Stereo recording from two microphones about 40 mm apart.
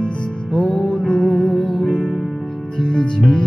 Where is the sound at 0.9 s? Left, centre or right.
Centre.